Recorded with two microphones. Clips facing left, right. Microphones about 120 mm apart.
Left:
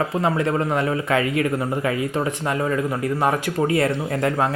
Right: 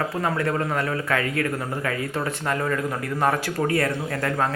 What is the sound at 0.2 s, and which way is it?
Speech, 20° left (ahead or behind).